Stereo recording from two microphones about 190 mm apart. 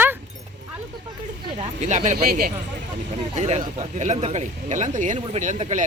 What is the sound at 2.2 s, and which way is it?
Speech, 50° right (ahead or behind).